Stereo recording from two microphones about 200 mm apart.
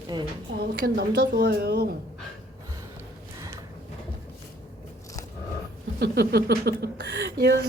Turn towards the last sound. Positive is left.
turn(degrees=-55)  # may be behind; listen again after turning